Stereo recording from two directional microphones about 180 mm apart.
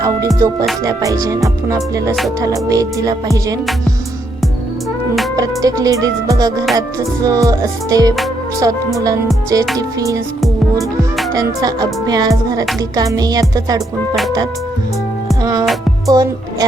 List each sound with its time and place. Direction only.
0.3 s music: 20° right (ahead or behind)
2.4 s music: 20° right (ahead or behind)
5.4 s music: 20° right (ahead or behind)
11.3 s music: 20° right (ahead or behind)
16.0 s speech: 20° right (ahead or behind)